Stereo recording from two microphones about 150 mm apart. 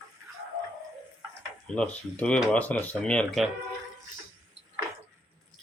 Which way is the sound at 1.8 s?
10° left (ahead or behind).